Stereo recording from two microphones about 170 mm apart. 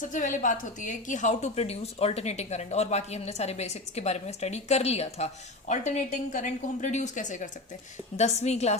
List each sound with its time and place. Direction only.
0.0 s a woman's voice: 50° left (ahead or behind)